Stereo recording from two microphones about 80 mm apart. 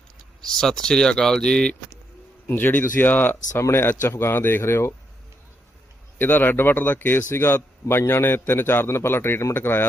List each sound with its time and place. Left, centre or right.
0.4 s speech: centre
2.5 s a man's voice: left
6.1 s a man's voice: left